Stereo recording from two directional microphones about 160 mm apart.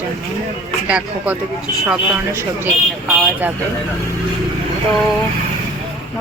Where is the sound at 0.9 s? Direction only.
10° right (ahead or behind).